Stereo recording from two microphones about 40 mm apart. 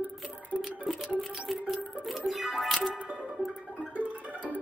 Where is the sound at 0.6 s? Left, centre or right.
Centre.